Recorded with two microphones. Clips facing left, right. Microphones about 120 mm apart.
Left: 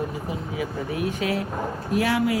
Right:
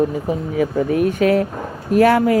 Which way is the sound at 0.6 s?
50° right (ahead or behind).